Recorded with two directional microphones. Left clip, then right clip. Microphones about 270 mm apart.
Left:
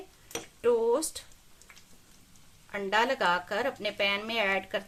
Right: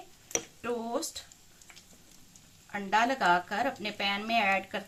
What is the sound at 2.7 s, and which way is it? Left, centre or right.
A woman's voice, left.